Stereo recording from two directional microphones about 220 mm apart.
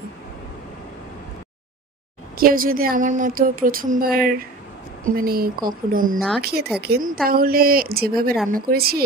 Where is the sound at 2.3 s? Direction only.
40° right (ahead or behind).